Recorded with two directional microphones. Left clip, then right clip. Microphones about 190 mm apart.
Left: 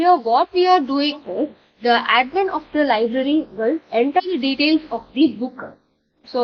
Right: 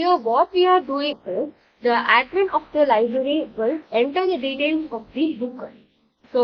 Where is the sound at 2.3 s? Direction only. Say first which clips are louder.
Even; 35° left (ahead or behind).